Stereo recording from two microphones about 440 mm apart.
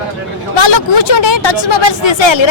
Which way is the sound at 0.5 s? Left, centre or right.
Left.